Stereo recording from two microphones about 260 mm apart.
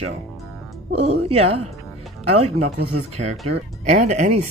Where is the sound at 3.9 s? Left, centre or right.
Right.